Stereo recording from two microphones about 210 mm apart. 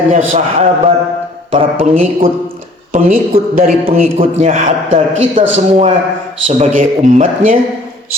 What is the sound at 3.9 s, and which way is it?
A man's voice, 30° right (ahead or behind).